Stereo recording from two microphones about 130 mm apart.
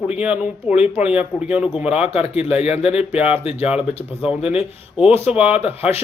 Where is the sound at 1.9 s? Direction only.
50° left (ahead or behind).